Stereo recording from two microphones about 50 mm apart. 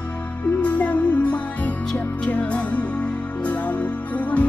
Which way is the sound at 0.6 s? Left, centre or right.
Left.